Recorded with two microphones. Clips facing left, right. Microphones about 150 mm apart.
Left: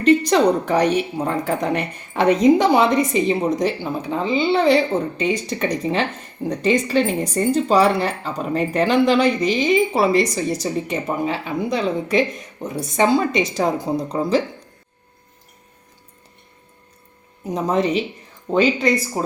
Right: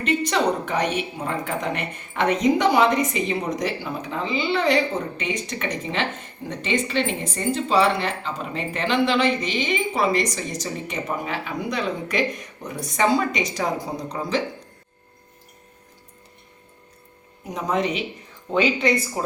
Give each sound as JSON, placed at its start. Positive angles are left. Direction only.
{"t": 0.0, "sound": "a woman's voice", "side_deg": 35}
{"t": 17.5, "sound": "speech", "side_deg": 35}